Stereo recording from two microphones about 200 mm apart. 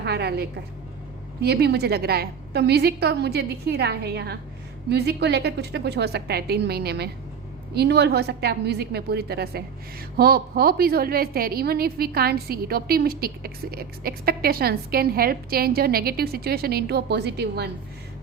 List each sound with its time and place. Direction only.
0.0 s a woman's voice: 55° right (ahead or behind)